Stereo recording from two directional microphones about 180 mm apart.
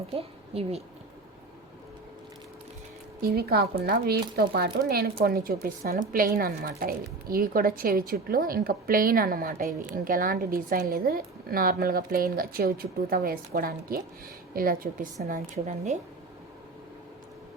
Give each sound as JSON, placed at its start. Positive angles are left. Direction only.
{"t": 0.1, "sound": "a woman's voice", "side_deg": -35}
{"t": 3.2, "sound": "a woman's voice", "side_deg": -60}
{"t": 15.3, "sound": "speech", "side_deg": -40}